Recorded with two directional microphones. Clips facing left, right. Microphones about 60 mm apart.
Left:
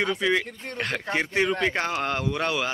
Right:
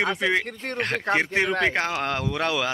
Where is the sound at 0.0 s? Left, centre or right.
Right.